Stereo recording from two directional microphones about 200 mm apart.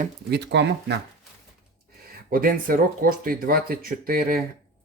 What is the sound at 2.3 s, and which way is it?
Speech, 45° right (ahead or behind).